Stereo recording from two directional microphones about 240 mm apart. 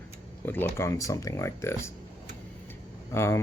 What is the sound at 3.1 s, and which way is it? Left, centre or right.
Speech, centre.